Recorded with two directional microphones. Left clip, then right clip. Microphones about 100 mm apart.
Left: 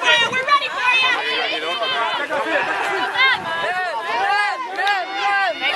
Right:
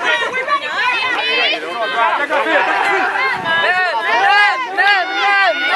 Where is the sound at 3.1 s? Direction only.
20° left (ahead or behind).